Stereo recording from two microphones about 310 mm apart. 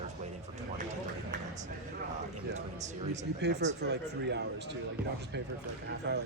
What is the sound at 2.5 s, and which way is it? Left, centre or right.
Speech, right.